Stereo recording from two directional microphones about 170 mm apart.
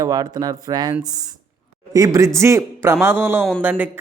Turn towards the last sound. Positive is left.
turn(degrees=-10)  # may be behind; listen again after turning